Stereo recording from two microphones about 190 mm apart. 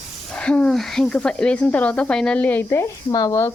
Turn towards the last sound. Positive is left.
turn(degrees=15)  # may be behind; listen again after turning